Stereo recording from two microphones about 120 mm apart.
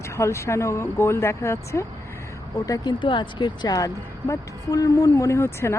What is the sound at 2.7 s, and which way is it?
Speech, 40° left (ahead or behind).